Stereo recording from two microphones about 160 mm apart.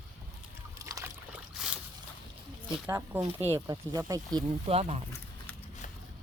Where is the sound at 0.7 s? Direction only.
20° right (ahead or behind).